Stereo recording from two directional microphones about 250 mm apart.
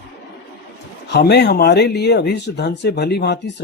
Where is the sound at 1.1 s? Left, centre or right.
Left.